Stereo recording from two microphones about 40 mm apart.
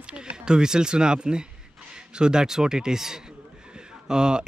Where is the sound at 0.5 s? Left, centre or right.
Centre.